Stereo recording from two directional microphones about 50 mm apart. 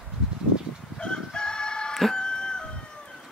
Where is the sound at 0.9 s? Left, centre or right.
Centre.